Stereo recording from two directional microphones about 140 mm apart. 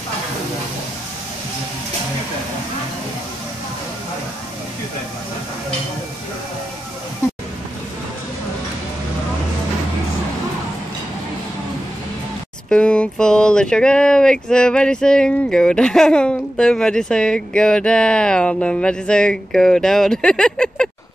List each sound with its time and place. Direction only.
12.6 s speech: 5° left (ahead or behind)